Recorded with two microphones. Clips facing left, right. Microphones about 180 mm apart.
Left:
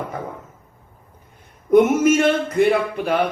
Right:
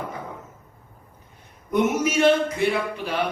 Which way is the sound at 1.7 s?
50° left (ahead or behind).